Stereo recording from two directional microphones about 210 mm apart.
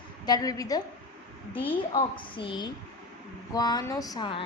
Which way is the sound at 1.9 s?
25° left (ahead or behind).